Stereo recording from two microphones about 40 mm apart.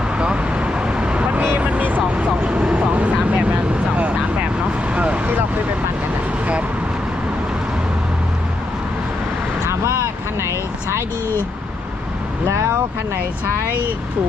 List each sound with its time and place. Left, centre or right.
0.2 s vehicle: right
2.0 s vehicle: right